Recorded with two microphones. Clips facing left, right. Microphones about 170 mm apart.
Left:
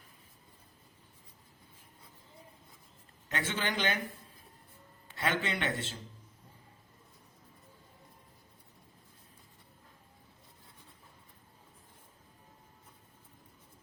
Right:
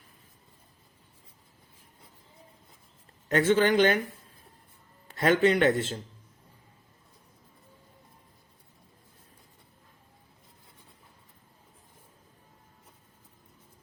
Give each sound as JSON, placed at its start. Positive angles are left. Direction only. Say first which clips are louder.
{"t": 3.2, "sound": "speech", "louder": "right 13 dB", "side_deg": -45}
{"t": 5.1, "sound": "speech", "louder": "right 11 dB", "side_deg": -45}